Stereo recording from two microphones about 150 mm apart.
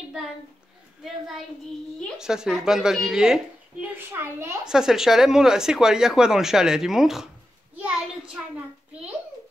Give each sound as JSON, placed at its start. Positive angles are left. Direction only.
{"t": 1.0, "sound": "speech", "side_deg": 0}
{"t": 3.9, "sound": "a child's voice", "side_deg": -15}
{"t": 4.6, "sound": "a child's voice", "side_deg": -5}